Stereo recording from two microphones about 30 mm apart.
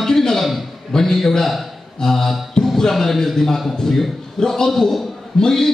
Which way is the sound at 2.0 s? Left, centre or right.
Centre.